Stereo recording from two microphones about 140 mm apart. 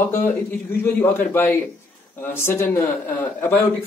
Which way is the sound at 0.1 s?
15° left (ahead or behind).